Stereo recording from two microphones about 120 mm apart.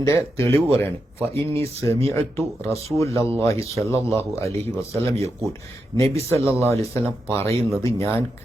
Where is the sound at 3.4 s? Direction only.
25° left (ahead or behind).